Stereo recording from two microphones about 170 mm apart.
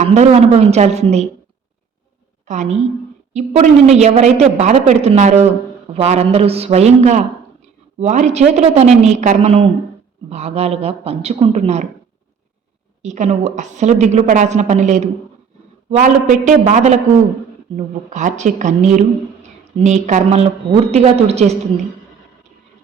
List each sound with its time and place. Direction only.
0.0 s a woman's voice: 40° right (ahead or behind)
2.5 s a woman's voice: 45° right (ahead or behind)
13.0 s a woman's voice: 45° right (ahead or behind)
18.1 s a woman's voice: 45° right (ahead or behind)